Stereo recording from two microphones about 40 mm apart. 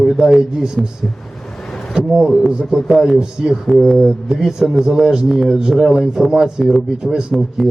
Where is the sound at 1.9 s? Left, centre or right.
Centre.